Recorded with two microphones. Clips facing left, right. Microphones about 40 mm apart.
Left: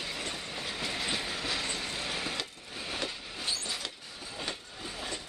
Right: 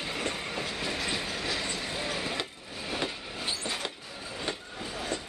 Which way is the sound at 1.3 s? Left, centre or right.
Centre.